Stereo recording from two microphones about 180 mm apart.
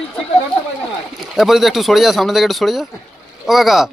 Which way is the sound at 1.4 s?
Centre (ahead or behind).